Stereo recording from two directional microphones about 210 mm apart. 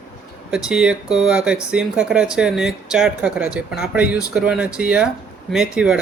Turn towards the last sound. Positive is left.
turn(degrees=0)  # may be behind; listen again after turning